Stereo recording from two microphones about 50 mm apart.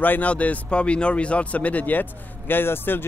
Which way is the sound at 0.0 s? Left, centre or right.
Left.